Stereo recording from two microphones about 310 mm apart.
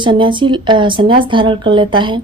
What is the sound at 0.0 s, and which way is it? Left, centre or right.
Speech, centre.